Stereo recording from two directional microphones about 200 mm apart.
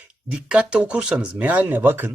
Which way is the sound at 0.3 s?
5° right (ahead or behind).